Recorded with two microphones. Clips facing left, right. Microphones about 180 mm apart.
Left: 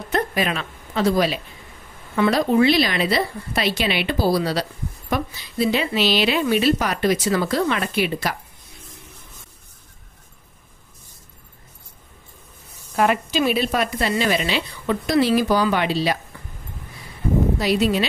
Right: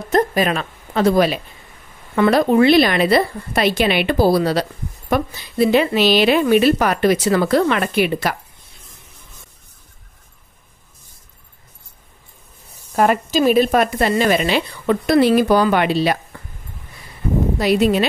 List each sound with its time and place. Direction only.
0.1 s a woman's voice: 45° right (ahead or behind)
12.9 s a woman's voice: 45° right (ahead or behind)
17.6 s a woman's voice: 55° right (ahead or behind)